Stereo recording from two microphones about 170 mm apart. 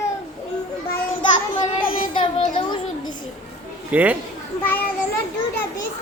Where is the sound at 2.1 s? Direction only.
30° left (ahead or behind).